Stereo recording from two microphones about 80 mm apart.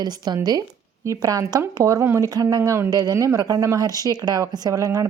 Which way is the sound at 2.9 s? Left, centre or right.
Right.